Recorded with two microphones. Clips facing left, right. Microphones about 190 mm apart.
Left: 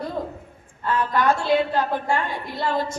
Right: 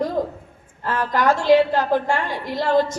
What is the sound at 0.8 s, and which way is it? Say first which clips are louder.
A woman's voice: right 1 dB; 90° right.